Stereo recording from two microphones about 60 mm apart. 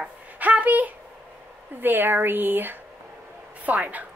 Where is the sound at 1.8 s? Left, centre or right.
Right.